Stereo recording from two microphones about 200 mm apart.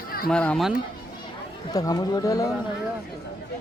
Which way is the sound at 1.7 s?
20° left (ahead or behind).